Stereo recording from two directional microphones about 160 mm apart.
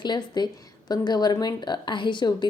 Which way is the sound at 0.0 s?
30° left (ahead or behind).